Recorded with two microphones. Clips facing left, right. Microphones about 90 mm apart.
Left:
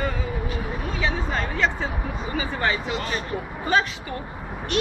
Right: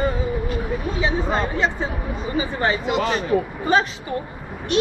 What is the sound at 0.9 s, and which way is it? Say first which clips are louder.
Speech: right 4 dB; 25° right (ahead or behind).